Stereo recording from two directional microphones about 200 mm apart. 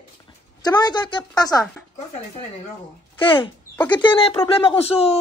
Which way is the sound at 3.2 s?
25° left (ahead or behind).